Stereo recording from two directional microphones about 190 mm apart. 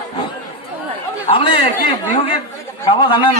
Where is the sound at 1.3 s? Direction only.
25° left (ahead or behind).